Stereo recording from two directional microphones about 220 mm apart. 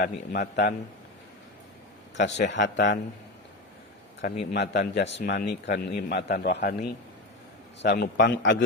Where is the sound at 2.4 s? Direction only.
55° left (ahead or behind).